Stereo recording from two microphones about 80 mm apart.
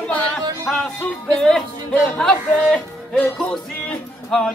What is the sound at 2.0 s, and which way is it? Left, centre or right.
Speech, centre.